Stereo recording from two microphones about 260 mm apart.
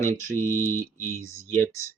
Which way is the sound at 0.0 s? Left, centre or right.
Centre.